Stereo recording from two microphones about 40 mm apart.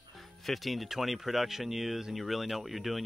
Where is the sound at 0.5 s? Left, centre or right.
Centre.